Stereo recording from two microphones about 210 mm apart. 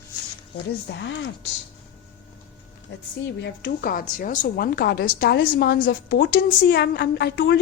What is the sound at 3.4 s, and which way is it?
A woman's voice, 55° left (ahead or behind).